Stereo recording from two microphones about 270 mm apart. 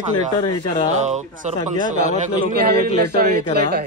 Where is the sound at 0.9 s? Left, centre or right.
Right.